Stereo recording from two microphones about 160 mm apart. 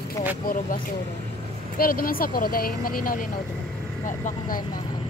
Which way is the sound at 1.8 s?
65° left (ahead or behind).